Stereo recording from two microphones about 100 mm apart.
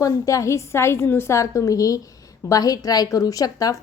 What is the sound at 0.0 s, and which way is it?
A woman's voice, 35° left (ahead or behind).